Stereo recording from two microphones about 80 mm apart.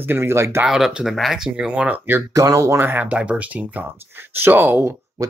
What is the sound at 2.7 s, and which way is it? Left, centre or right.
Speech, right.